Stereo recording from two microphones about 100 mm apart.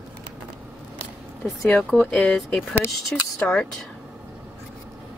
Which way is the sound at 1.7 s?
15° left (ahead or behind).